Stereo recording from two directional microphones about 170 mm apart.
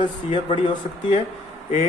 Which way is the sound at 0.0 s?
30° left (ahead or behind).